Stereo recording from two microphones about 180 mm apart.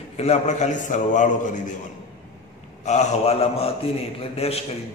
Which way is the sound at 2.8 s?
40° left (ahead or behind).